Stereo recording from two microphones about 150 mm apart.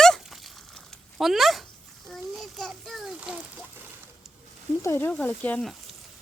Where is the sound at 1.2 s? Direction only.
Centre (ahead or behind).